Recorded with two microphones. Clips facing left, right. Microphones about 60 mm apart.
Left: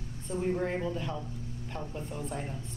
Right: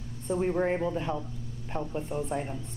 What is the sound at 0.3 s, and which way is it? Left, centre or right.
A woman's voice, right.